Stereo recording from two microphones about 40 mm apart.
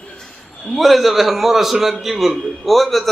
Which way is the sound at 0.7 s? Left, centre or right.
Centre.